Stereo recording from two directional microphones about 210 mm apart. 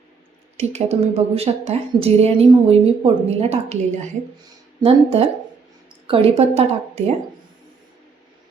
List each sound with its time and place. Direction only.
0.6 s a woman's voice: 30° right (ahead or behind)